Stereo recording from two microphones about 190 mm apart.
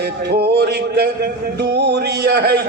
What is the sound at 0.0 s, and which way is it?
A man's voice, 55° right (ahead or behind).